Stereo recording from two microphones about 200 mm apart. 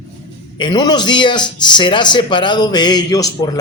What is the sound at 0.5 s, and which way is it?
Speech, 20° left (ahead or behind).